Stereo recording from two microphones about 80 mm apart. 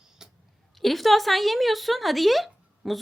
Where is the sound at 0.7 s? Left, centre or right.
Centre.